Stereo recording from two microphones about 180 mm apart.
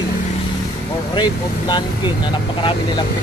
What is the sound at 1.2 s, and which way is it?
Speech, 25° left (ahead or behind).